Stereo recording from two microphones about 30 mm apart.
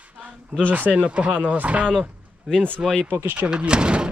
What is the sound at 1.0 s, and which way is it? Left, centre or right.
Speech, right.